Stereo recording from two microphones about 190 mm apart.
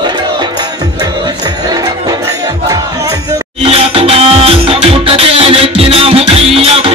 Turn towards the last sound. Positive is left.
turn(degrees=-30)  # may be behind; listen again after turning